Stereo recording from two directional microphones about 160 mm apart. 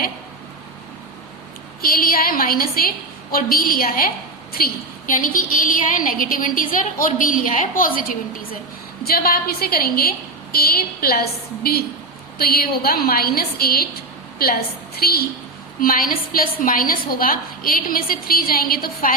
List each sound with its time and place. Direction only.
1.8 s a woman's voice: 65° left (ahead or behind)
9.0 s a woman's voice: 70° left (ahead or behind)
15.8 s a woman's voice: 60° left (ahead or behind)